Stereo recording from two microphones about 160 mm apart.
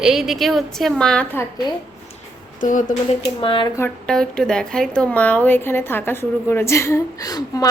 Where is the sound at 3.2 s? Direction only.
30° left (ahead or behind).